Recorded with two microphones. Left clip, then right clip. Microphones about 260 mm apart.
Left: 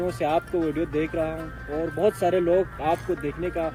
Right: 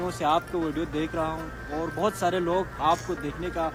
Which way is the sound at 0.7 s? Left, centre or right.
Centre.